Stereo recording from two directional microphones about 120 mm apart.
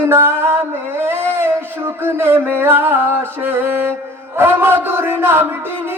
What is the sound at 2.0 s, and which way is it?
Music, 20° right (ahead or behind).